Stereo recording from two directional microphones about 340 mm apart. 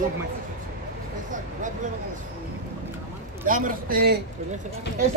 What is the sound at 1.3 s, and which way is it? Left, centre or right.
Vehicle, right.